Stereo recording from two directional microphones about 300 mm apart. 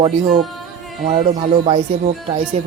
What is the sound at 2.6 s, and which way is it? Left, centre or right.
Speech, right.